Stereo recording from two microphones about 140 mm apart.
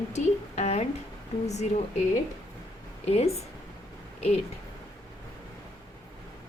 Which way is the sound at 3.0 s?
50° left (ahead or behind).